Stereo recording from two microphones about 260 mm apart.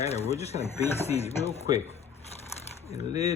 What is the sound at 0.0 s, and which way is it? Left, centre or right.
Chopping, left.